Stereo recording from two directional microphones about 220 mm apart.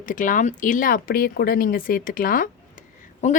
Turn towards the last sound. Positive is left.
turn(degrees=35)  # may be behind; listen again after turning